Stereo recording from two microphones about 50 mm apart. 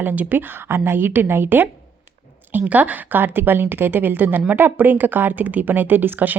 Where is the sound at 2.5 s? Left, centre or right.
Right.